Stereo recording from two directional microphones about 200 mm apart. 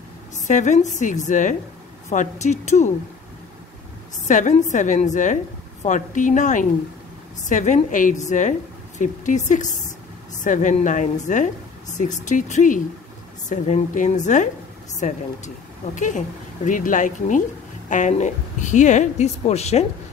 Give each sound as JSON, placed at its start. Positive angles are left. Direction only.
{"t": 0.5, "sound": "a woman's voice", "side_deg": 35}
{"t": 4.3, "sound": "a woman's voice", "side_deg": 40}